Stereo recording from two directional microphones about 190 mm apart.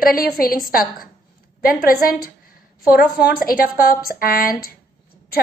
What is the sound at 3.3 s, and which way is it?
A woman's voice, 50° left (ahead or behind).